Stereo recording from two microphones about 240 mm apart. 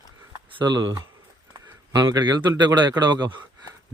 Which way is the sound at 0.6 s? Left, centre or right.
Centre.